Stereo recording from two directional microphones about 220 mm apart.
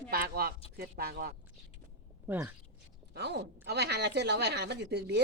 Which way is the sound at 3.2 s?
50° right (ahead or behind).